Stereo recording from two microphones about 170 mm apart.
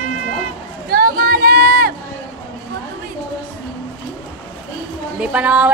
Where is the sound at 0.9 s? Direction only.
65° right (ahead or behind).